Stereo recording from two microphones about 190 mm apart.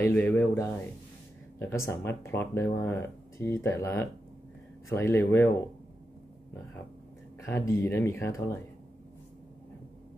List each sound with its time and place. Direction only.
0.0 s speech: 10° left (ahead or behind)
7.4 s speech: 15° left (ahead or behind)